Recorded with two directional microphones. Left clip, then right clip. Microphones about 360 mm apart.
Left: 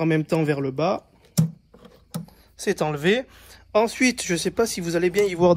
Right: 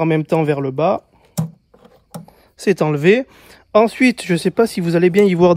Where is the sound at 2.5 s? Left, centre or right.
Right.